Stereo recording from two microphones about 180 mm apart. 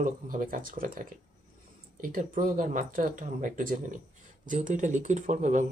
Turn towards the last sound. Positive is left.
turn(degrees=-40)  # may be behind; listen again after turning